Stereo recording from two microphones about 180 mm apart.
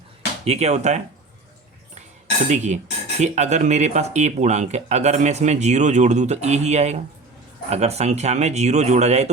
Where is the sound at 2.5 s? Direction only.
40° right (ahead or behind).